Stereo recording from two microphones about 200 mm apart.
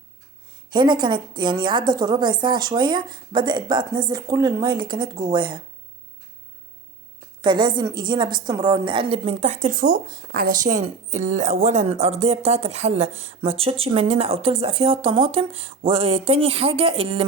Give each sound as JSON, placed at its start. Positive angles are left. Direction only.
{"t": 0.7, "sound": "a woman's voice", "side_deg": -25}
{"t": 7.4, "sound": "a woman's voice", "side_deg": -20}